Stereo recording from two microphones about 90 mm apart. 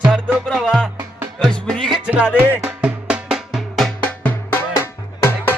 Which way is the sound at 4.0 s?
20° left (ahead or behind).